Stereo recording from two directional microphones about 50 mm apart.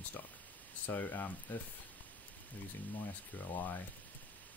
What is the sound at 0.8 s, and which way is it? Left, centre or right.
Speech, left.